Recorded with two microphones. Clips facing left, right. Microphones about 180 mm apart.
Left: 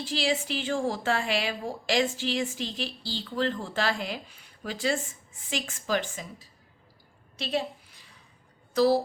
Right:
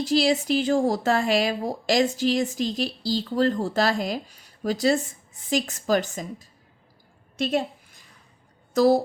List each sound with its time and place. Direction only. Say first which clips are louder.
0.0 s speech: right 7 dB; 40° right (ahead or behind)
7.3 s a sound: right 5 dB; 50° right (ahead or behind)
8.7 s speech: right 4 dB; 45° right (ahead or behind)